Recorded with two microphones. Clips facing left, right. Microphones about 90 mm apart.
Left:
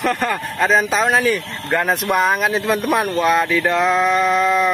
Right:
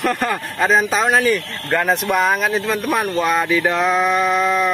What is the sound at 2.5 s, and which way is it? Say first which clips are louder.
Speech: left 1 dB; 15° left (ahead or behind).